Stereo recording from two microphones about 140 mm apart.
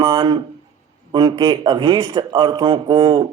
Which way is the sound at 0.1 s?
30° right (ahead or behind).